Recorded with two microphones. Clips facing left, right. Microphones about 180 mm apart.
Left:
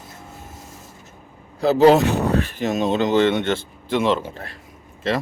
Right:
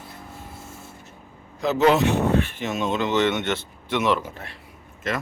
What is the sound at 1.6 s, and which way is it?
Speech, 35° left (ahead or behind).